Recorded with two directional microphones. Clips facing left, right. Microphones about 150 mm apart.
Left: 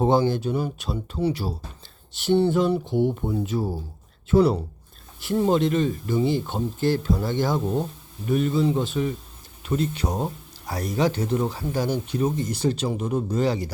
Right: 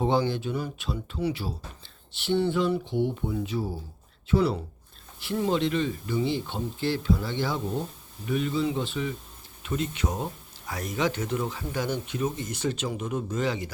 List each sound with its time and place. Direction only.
0.0 s speech: 40° left (ahead or behind)